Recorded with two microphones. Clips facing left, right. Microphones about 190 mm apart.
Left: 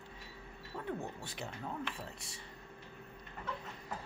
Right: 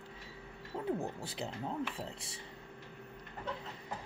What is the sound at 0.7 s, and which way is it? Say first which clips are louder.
Speech: right 4 dB; 30° right (ahead or behind).